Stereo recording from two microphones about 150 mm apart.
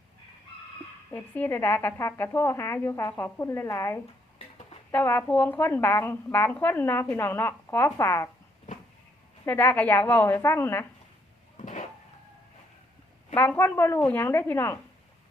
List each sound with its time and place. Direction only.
1.1 s speech: 15° left (ahead or behind)
9.5 s speech: 15° left (ahead or behind)
11.5 s a sound: 60° left (ahead or behind)
13.3 s speech: 15° left (ahead or behind)